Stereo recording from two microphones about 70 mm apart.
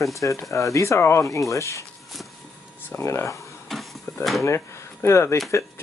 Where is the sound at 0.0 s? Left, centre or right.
Left.